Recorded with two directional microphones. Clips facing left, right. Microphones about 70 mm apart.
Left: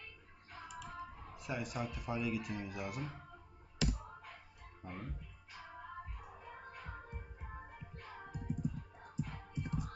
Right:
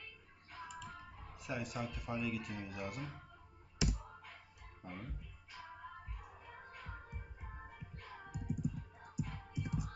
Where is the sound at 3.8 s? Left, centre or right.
Centre.